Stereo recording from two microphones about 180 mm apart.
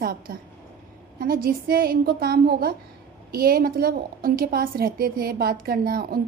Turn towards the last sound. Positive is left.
turn(degrees=-55)  # may be behind; listen again after turning